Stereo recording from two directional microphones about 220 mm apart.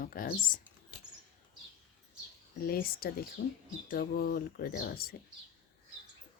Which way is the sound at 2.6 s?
40° left (ahead or behind).